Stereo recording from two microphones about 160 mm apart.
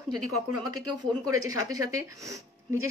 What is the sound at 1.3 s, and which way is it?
A woman's voice, 20° right (ahead or behind).